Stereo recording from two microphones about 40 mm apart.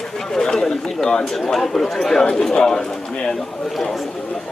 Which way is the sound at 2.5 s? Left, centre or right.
Centre.